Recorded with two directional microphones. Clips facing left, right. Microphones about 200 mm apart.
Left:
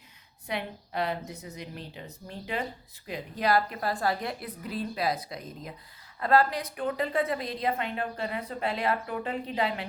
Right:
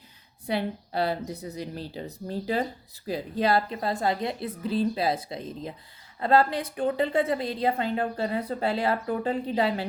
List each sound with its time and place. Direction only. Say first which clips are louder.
0.4 s a woman's voice: right 6 dB; 35° right (ahead or behind)